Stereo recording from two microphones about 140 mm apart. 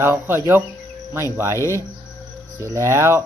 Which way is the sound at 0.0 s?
15° right (ahead or behind).